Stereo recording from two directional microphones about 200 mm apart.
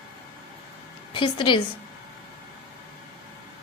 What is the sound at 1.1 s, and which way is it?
Speech, 25° left (ahead or behind).